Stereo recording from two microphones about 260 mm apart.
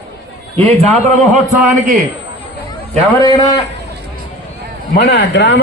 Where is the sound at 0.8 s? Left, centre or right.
Right.